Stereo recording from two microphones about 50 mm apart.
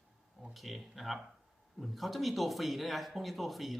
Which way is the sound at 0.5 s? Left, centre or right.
Centre.